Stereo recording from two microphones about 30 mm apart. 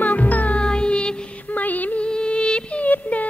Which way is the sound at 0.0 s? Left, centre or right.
Left.